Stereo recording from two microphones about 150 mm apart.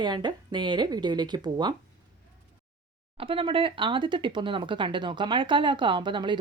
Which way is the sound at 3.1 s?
35° right (ahead or behind).